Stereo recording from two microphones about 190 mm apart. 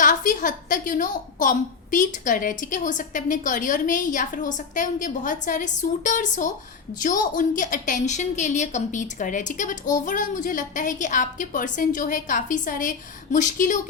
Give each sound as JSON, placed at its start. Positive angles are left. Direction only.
{"t": 0.0, "sound": "a woman's voice", "side_deg": 45}